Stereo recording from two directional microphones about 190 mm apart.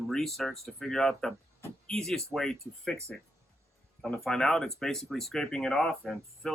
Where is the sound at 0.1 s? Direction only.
Centre (ahead or behind).